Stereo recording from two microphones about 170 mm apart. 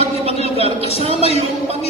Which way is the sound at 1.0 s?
35° right (ahead or behind).